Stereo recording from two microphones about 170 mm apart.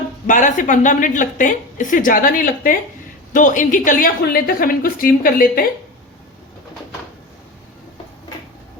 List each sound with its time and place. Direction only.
0.3 s a woman's voice: 50° left (ahead or behind)